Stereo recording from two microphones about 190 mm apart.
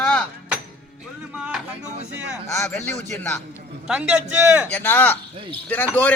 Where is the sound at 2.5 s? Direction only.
10° left (ahead or behind).